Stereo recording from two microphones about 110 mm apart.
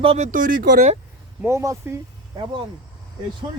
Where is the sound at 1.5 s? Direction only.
30° right (ahead or behind).